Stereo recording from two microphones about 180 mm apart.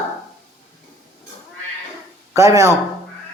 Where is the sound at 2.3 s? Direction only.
15° right (ahead or behind).